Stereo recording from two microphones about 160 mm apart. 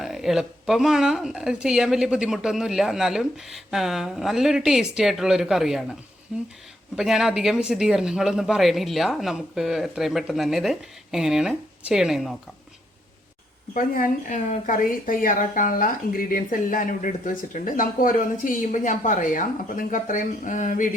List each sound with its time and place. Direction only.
0.0 s speech: centre (ahead or behind)
13.7 s a woman's voice: 60° left (ahead or behind)